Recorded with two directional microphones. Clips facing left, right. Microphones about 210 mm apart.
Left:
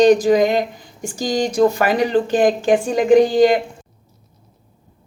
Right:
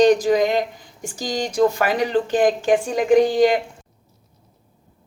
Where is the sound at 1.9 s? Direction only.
Centre (ahead or behind).